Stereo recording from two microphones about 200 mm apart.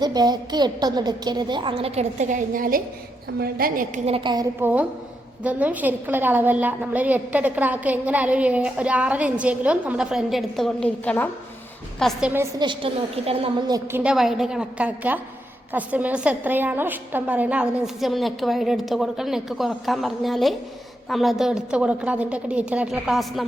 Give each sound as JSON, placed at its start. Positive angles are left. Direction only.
{"t": 0.0, "sound": "a woman's voice", "side_deg": -20}
{"t": 4.6, "sound": "a woman's voice", "side_deg": -5}
{"t": 12.3, "sound": "a woman's voice", "side_deg": -10}
{"t": 12.6, "sound": "a woman's voice", "side_deg": -25}
{"t": 14.0, "sound": "a woman's voice", "side_deg": -5}